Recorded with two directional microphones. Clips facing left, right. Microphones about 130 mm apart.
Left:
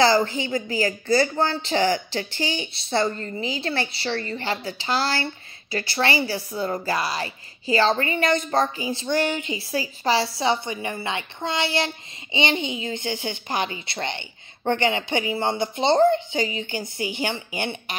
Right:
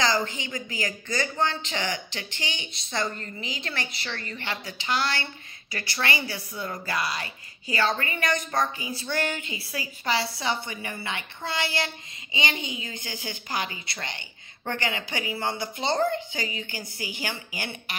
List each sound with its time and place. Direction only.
0.0 s a woman's voice: 35° left (ahead or behind)